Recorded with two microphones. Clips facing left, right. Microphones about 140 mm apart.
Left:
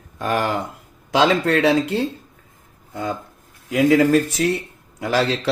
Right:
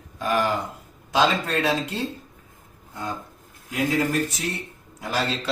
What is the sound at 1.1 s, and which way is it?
Speech, 75° left (ahead or behind).